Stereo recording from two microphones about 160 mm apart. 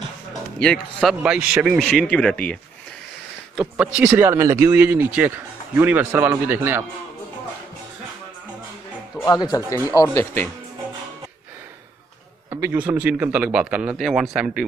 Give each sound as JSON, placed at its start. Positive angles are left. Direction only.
{"t": 0.3, "sound": "speech", "side_deg": 5}
{"t": 1.8, "sound": "speech", "side_deg": 5}
{"t": 3.5, "sound": "speech", "side_deg": -5}
{"t": 4.1, "sound": "speech", "side_deg": -15}
{"t": 9.2, "sound": "speech", "side_deg": 20}
{"t": 12.4, "sound": "speech", "side_deg": -15}